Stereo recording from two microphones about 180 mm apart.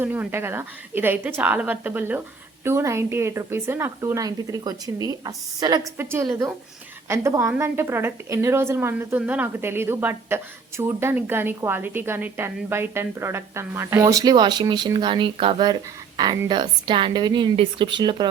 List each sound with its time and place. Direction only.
0.0 s a woman's voice: 10° right (ahead or behind)